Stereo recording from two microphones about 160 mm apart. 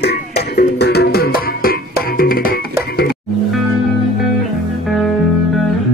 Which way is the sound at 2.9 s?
80° left.